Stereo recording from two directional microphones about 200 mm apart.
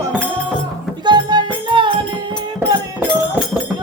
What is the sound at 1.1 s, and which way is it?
Music, 20° right (ahead or behind).